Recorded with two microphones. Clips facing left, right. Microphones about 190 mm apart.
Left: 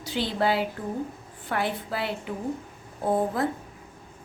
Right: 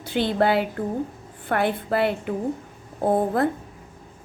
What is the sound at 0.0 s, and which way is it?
A woman's voice, 55° right (ahead or behind).